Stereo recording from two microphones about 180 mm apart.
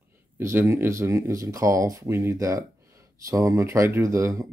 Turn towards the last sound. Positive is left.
turn(degrees=-15)  # may be behind; listen again after turning